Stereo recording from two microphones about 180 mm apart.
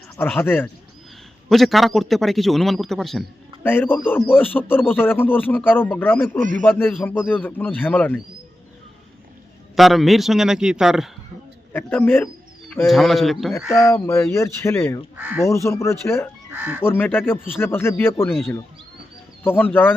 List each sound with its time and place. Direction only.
0.2 s speech: 10° left (ahead or behind)
1.5 s a man's voice: centre (ahead or behind)
9.7 s a man's voice: centre (ahead or behind)
11.7 s speech: 10° left (ahead or behind)
12.8 s a man's voice: centre (ahead or behind)
13.8 s speech: 15° left (ahead or behind)
15.1 s speech: 5° right (ahead or behind)
15.4 s speech: 15° left (ahead or behind)
16.5 s speech: 10° right (ahead or behind)
16.8 s speech: 10° left (ahead or behind)